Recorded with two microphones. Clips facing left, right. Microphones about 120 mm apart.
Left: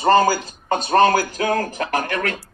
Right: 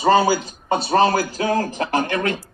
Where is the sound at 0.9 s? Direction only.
55° left (ahead or behind).